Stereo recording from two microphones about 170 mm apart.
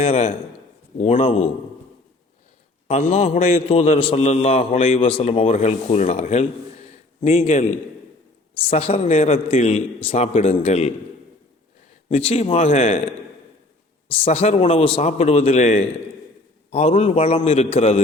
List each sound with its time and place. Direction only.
0.0 s a man's voice: 35° left (ahead or behind)
3.1 s a man's voice: 40° left (ahead or behind)
12.0 s a man's voice: 35° left (ahead or behind)
14.1 s a man's voice: 40° left (ahead or behind)